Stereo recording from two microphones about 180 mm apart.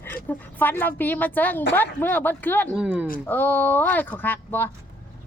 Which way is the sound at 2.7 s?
5° right (ahead or behind).